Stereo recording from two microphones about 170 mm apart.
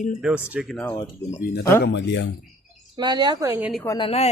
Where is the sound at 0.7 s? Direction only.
10° left (ahead or behind).